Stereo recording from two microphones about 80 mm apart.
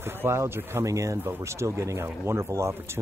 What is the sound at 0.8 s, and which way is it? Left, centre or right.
Speech, right.